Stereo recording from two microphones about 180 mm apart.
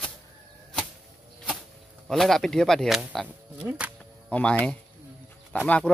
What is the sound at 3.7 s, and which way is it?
Insect, 10° right (ahead or behind).